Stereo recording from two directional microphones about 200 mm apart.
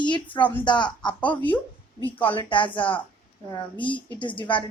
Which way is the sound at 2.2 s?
25° left (ahead or behind).